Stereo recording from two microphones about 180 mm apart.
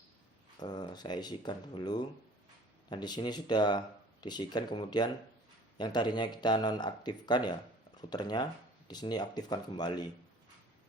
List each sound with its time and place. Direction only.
0.6 s speech: 25° left (ahead or behind)